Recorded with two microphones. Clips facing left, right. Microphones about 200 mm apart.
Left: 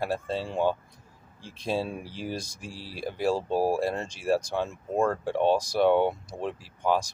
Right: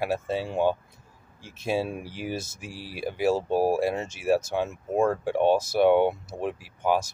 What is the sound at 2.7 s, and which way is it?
Speech, 25° left (ahead or behind).